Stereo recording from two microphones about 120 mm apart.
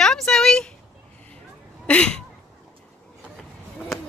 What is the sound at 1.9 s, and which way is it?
Speech, 5° left (ahead or behind).